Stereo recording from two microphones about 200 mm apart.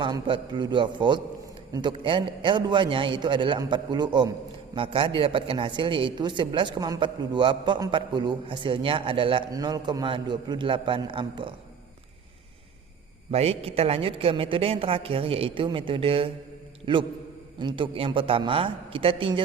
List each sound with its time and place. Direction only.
0.0 s a man's voice: 25° right (ahead or behind)
13.3 s a man's voice: 30° right (ahead or behind)